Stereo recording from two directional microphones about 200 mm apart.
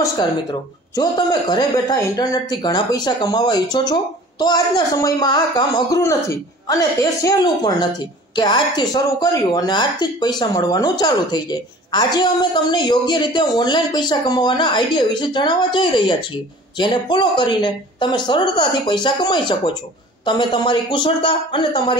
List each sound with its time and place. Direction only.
0.0 s a man's voice: 20° left (ahead or behind)